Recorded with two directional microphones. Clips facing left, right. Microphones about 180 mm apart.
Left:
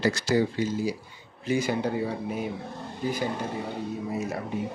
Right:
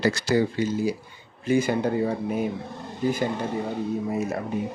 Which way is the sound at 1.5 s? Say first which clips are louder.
Right 4 dB; 50° right (ahead or behind).